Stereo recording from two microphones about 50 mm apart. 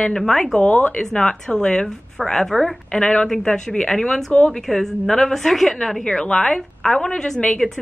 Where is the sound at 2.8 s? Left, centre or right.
Centre.